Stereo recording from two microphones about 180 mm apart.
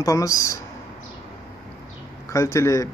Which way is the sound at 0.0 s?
20° left (ahead or behind).